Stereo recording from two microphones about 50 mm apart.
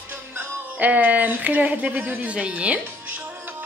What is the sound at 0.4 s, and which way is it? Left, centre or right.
A woman's voice, right.